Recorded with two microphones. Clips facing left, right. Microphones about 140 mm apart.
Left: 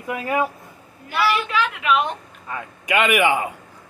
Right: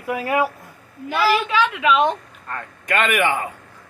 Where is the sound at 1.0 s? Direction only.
90° right.